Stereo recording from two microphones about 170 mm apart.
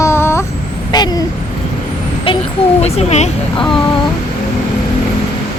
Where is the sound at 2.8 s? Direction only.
40° left (ahead or behind).